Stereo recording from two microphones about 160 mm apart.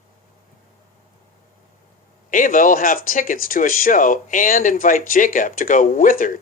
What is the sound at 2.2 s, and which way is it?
Speech, 55° left (ahead or behind).